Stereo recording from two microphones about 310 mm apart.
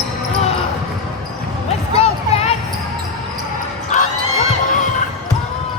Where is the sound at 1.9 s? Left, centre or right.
Centre.